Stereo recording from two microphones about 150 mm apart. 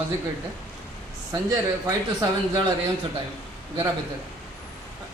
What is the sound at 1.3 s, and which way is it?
Speech, 20° right (ahead or behind).